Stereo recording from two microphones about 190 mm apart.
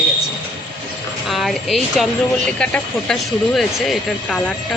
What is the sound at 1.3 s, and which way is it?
Speech, centre (ahead or behind).